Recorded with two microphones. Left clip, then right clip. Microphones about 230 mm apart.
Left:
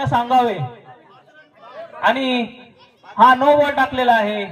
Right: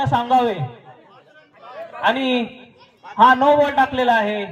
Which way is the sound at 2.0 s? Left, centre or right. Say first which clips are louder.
Left 1 dB; left.